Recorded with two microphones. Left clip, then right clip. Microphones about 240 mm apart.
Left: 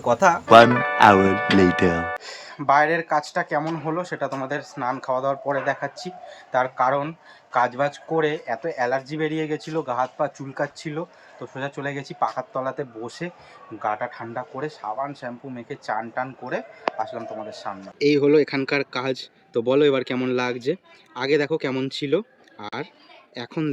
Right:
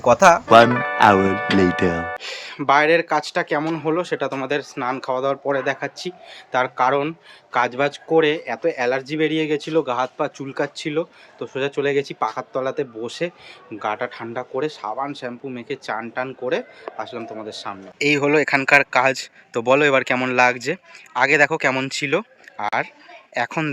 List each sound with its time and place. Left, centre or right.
0.0 s speech: centre
0.4 s speech: centre